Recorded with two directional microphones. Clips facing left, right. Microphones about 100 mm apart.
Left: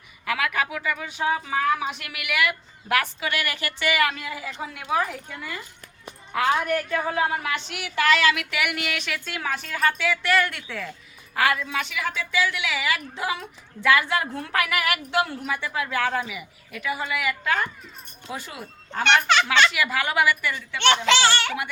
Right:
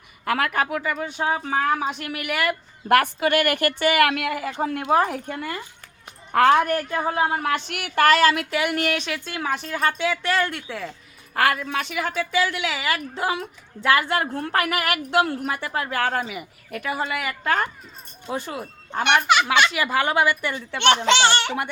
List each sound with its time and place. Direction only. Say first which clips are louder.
0.3 s a woman's voice: right 3 dB; 45° right (ahead or behind); by 10.8 s 25° right (ahead or behind)
11.3 s a woman's voice: right 2 dB; 50° right (ahead or behind)
18.9 s a child's voice: right 1 dB; 15° right (ahead or behind)
19.7 s speech: right 3 dB; 30° right (ahead or behind)
21.1 s speech: right 2 dB; 25° right (ahead or behind)